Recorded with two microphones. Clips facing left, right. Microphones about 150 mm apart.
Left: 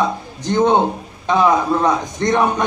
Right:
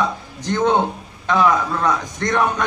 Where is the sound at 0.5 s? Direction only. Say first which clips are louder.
Left 3 dB; 25° left (ahead or behind).